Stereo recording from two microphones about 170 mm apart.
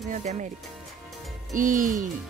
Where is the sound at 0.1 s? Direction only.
45° right (ahead or behind).